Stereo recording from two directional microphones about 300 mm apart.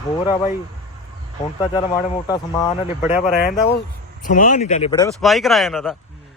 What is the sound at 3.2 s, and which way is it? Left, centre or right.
Speech, left.